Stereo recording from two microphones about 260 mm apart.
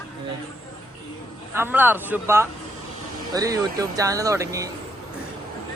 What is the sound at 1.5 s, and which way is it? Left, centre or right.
Speech, centre.